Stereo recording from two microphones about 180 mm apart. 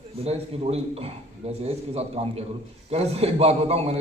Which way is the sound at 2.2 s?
30° right (ahead or behind).